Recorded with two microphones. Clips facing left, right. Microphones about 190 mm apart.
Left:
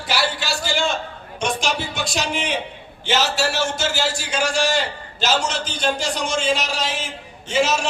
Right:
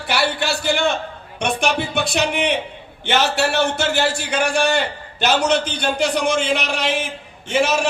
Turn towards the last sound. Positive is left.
turn(degrees=-55)  # may be behind; listen again after turning